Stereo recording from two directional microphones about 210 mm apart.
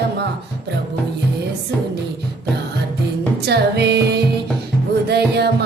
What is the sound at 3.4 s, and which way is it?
Music, 50° right (ahead or behind).